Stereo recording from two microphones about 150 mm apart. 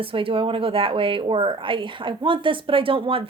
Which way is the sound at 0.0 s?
35° right (ahead or behind).